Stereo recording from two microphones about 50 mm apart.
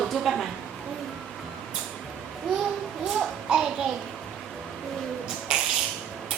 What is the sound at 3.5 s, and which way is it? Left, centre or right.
Speech, centre.